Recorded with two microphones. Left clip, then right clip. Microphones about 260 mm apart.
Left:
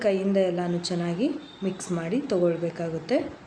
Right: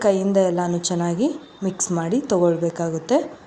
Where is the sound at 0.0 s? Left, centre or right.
Right.